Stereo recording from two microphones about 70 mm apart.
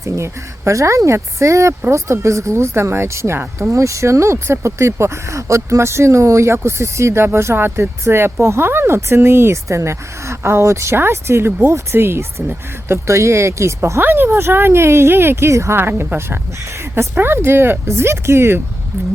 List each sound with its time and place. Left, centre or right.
0.0 s speech: right
14.0 s speech: right